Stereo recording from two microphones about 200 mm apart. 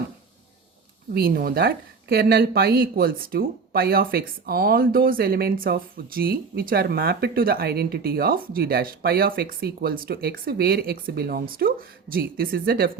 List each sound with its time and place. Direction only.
1.1 s speech: 50° right (ahead or behind)